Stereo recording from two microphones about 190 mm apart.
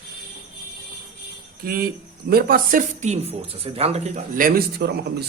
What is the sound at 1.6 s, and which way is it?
Speech, 50° right (ahead or behind).